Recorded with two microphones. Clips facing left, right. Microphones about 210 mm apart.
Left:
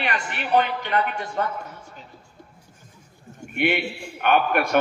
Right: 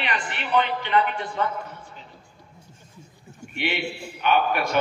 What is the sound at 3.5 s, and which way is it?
A man's voice, 55° left (ahead or behind).